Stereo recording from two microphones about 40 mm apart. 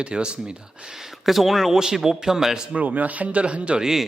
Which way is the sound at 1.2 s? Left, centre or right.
Centre.